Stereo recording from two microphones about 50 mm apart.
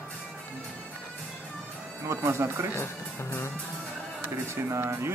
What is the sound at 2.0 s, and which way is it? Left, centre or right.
Speech, right.